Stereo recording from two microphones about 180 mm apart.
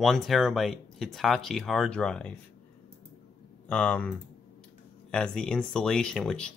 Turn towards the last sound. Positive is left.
turn(degrees=5)  # may be behind; listen again after turning